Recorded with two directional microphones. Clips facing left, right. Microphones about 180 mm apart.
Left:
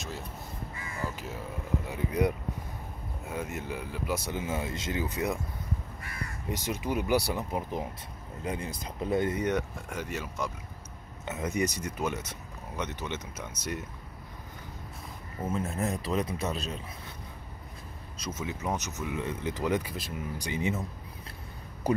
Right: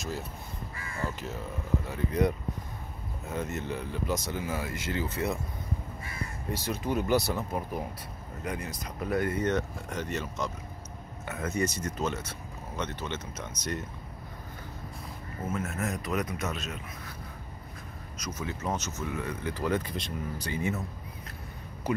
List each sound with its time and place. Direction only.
1.9 s speech: 10° left (ahead or behind)
6.5 s speech: 15° left (ahead or behind)
8.5 s speech: 30° left (ahead or behind); by 13.8 s 10° left (ahead or behind)
15.5 s speech: 30° left (ahead or behind)
18.2 s speech: 20° left (ahead or behind)